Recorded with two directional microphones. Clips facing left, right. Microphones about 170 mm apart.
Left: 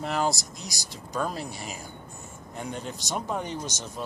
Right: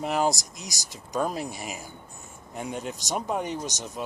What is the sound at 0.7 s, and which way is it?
Speech, 20° right (ahead or behind).